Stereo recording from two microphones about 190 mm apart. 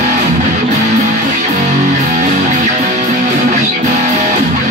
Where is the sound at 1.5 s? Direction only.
40° right (ahead or behind).